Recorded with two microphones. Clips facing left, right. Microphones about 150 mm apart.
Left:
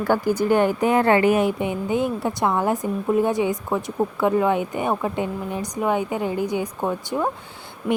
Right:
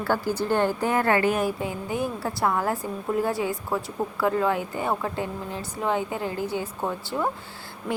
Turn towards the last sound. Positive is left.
turn(degrees=20)  # may be behind; listen again after turning